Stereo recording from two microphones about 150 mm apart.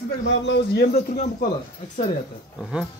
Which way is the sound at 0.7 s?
90° left.